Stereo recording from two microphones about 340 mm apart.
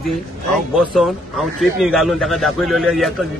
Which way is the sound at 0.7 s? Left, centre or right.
Centre.